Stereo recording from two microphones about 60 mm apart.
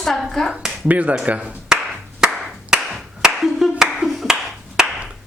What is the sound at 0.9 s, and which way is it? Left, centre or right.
Speech, right.